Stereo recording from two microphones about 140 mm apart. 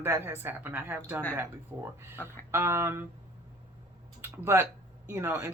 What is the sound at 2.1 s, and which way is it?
Speech, 15° left (ahead or behind).